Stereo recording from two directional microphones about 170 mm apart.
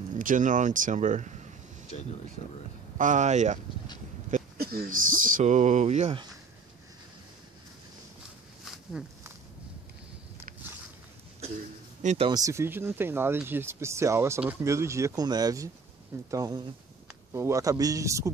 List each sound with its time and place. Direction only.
0.1 s speech: 50° right (ahead or behind)
1.9 s speech: 40° left (ahead or behind)
3.0 s speech: 45° right (ahead or behind)
4.3 s speech: 65° right (ahead or behind); by 6.1 s 40° right (ahead or behind)
12.0 s speech: 45° right (ahead or behind)
12.3 s speech: 20° right (ahead or behind)